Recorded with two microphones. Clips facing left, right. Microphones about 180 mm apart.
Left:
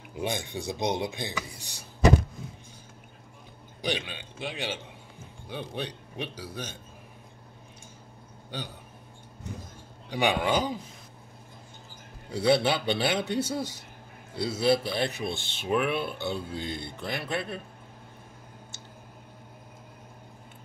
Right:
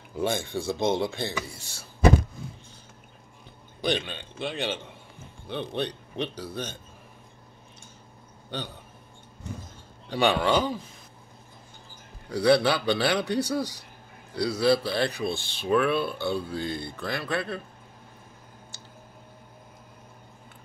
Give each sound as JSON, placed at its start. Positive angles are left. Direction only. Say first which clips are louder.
{"t": 0.1, "sound": "speech", "louder": "right 4 dB", "side_deg": 15}
{"t": 3.8, "sound": "speech", "louder": "right 4 dB", "side_deg": 10}
{"t": 5.8, "sound": "speech", "louder": "right 6 dB", "side_deg": 10}
{"t": 8.5, "sound": "speech", "louder": "right 3 dB", "side_deg": 10}
{"t": 10.0, "sound": "speech", "louder": "right 3 dB", "side_deg": 15}
{"t": 12.3, "sound": "speech", "louder": "right 3 dB", "side_deg": 25}